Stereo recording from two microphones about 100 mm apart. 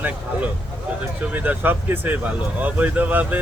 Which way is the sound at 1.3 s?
15° right (ahead or behind).